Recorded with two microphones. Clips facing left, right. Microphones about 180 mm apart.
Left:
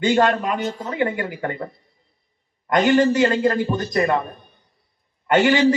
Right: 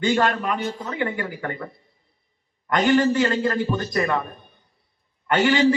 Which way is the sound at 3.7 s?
40° left (ahead or behind).